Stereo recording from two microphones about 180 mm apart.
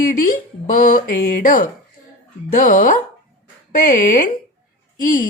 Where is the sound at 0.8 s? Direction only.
55° left (ahead or behind).